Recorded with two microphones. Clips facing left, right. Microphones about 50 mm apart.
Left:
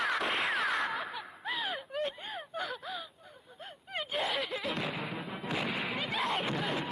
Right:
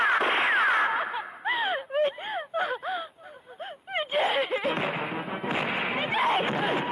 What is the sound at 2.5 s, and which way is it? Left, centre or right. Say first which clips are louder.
Gasp: right 9 dB; right.